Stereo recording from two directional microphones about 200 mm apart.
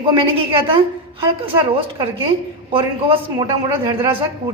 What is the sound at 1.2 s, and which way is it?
A man's voice, 25° right (ahead or behind).